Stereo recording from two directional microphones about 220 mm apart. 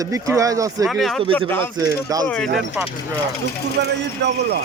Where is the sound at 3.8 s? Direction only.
50° right (ahead or behind).